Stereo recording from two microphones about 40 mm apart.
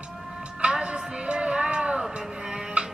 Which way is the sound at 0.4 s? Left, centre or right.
Right.